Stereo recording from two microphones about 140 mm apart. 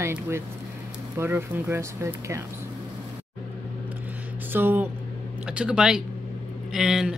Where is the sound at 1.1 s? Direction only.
15° right (ahead or behind).